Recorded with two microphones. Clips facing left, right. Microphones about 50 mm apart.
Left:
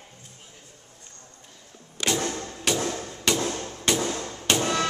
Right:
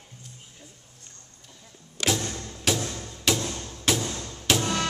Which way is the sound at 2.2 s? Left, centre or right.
Left.